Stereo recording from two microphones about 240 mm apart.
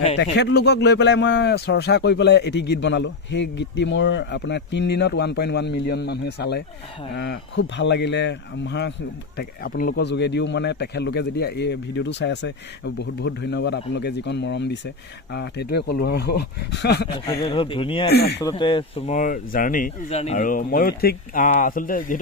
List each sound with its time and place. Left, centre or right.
0.2 s speech: left
17.1 s speech: left
18.1 s speech: left
18.4 s speech: centre; by 22.2 s left